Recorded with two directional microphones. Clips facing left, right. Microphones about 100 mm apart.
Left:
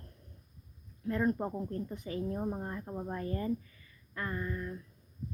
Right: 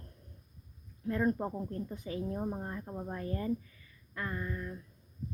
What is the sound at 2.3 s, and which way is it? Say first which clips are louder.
Speech: left 1 dB; centre (ahead or behind).